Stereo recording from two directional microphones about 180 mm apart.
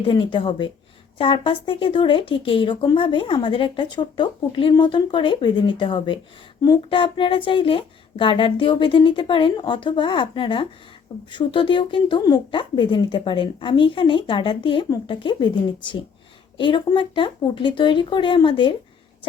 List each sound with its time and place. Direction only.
0.1 s speech: 25° left (ahead or behind)